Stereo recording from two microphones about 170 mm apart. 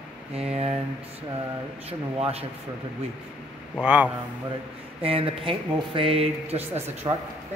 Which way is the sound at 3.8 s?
10° right (ahead or behind).